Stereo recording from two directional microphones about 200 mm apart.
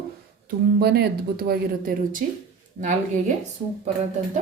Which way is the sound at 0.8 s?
50° right (ahead or behind).